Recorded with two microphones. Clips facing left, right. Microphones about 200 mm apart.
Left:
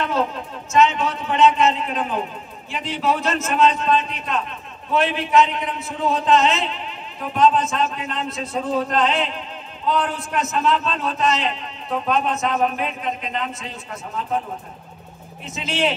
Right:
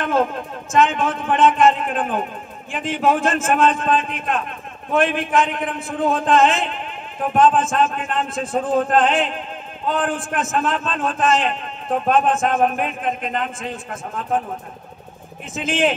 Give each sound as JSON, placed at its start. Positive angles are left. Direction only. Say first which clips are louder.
{"t": 0.0, "sound": "a man's voice", "louder": "right 3 dB", "side_deg": -50}
{"t": 15.5, "sound": "a man's voice", "louder": "right 3 dB", "side_deg": -50}